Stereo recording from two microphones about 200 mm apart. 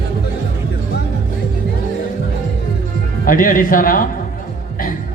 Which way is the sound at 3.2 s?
45° left (ahead or behind).